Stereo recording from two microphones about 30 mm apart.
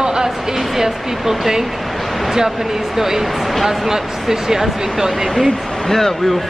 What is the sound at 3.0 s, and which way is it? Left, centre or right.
Speech, centre.